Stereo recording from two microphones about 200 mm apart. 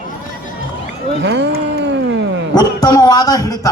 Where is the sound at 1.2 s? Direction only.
65° right (ahead or behind).